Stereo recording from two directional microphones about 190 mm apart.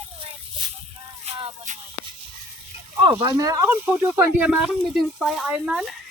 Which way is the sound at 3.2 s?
20° right (ahead or behind).